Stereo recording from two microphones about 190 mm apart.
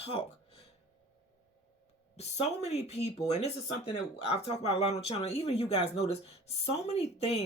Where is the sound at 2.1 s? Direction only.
35° left (ahead or behind).